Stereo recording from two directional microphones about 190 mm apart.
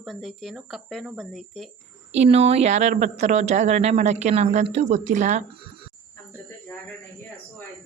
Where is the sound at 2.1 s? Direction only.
35° right (ahead or behind).